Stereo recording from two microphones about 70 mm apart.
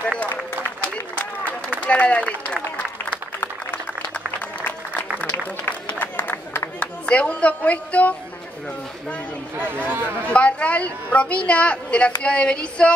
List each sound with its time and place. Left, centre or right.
0.8 s a sound: centre
4.6 s music: left
5.2 s applause: left
6.8 s speech: centre
9.8 s speech: right
10.3 s a woman's voice: centre